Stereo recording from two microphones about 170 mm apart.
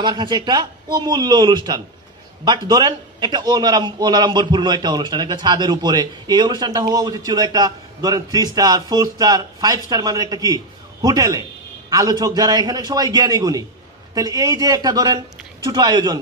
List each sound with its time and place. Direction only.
0.0 s a man's voice: 25° right (ahead or behind)